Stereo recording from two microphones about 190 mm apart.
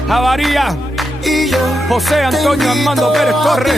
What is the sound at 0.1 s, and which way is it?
Music, centre (ahead or behind).